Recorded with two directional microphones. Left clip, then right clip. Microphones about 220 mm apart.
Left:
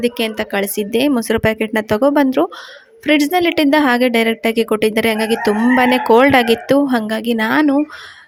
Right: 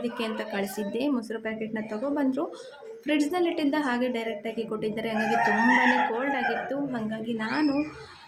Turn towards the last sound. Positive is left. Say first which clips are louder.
# left 13 dB
turn(degrees=45)  # may be behind; listen again after turning